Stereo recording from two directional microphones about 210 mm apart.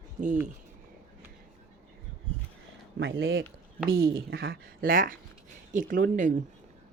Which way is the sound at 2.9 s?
55° right (ahead or behind).